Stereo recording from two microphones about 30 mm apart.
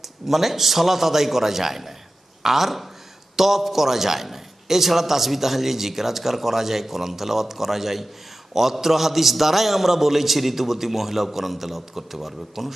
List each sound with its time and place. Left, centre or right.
0.0 s a man's voice: centre